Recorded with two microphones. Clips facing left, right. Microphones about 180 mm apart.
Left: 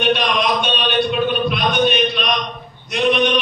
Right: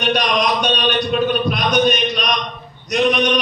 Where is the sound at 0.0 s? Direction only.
40° right (ahead or behind).